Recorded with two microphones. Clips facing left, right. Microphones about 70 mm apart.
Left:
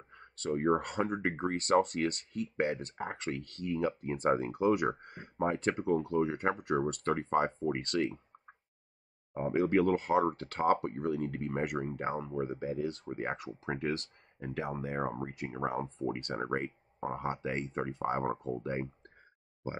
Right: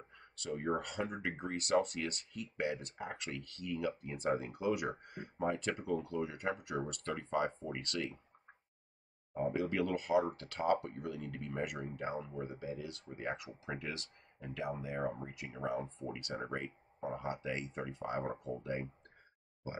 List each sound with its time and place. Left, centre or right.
0.4 s speech: left
9.3 s speech: left